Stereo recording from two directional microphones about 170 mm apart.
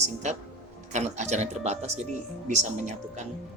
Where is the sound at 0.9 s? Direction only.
45° right (ahead or behind).